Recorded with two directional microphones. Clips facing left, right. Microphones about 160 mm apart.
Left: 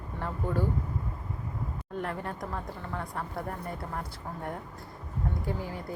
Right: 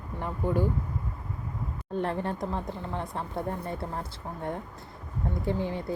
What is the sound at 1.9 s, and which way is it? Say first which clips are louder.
Speech: right 6 dB; 30° right (ahead or behind).